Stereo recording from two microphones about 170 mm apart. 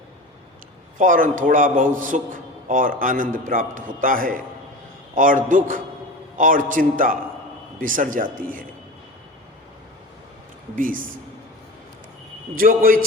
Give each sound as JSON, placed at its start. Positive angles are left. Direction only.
{"t": 0.9, "sound": "a man's voice", "side_deg": -50}
{"t": 10.8, "sound": "a man's voice", "side_deg": -55}
{"t": 12.5, "sound": "a man's voice", "side_deg": -55}